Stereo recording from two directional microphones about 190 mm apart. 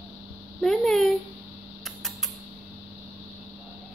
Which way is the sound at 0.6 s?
Centre (ahead or behind).